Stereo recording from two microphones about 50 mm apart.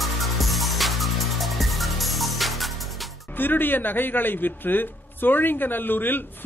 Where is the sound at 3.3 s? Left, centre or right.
Left.